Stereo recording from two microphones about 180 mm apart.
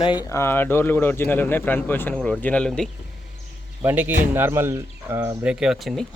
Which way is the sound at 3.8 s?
10° right (ahead or behind).